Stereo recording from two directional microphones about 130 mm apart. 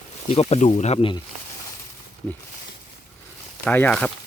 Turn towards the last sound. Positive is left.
turn(degrees=10)  # may be behind; listen again after turning